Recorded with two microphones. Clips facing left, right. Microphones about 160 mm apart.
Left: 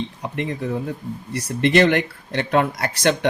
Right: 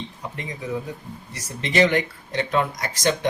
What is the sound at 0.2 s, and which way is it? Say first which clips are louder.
Speech: left 8 dB; 65° left (ahead or behind).